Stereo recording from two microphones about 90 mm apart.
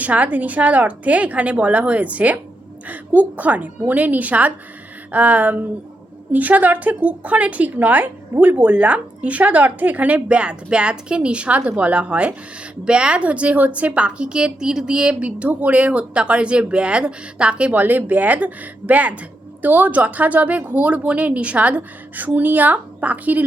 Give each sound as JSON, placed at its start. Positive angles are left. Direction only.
{"t": 0.0, "sound": "a woman's voice", "side_deg": -15}